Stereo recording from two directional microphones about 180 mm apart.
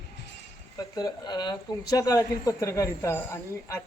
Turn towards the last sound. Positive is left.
turn(degrees=15)  # may be behind; listen again after turning